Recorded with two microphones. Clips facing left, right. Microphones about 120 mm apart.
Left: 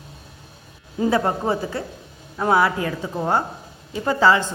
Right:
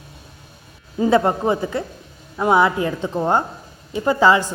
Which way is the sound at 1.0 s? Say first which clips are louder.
Right 4 dB; 25° right (ahead or behind).